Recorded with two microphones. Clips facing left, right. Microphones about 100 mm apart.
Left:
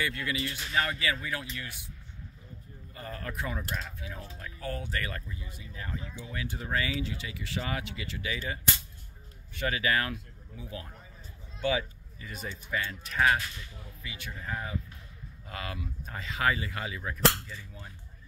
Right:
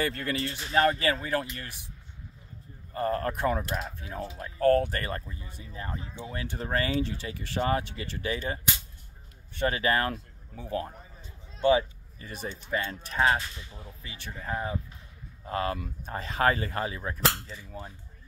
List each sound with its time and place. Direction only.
0.0 s speech: 45° right (ahead or behind)
2.9 s speech: 45° right (ahead or behind)
4.6 s speech: 55° right (ahead or behind)
5.0 s speech: 35° right (ahead or behind)
9.6 s speech: 35° right (ahead or behind)
11.6 s a sound: 40° right (ahead or behind)
12.4 s speech: 30° right (ahead or behind)